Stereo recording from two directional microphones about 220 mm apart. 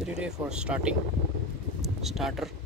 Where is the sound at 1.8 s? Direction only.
Centre (ahead or behind).